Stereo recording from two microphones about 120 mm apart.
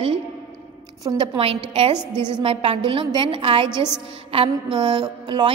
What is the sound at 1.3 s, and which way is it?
A woman's voice, 55° right (ahead or behind).